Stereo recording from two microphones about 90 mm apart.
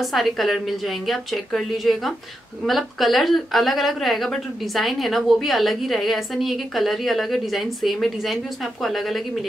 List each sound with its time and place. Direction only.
0.0 s a woman's voice: centre (ahead or behind)